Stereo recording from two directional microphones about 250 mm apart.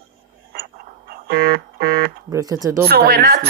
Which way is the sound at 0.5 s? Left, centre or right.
Right.